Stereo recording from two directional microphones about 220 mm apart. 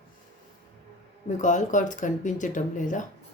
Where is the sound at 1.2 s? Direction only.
35° left (ahead or behind).